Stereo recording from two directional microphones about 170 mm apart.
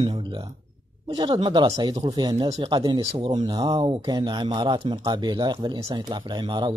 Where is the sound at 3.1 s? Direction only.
35° right (ahead or behind).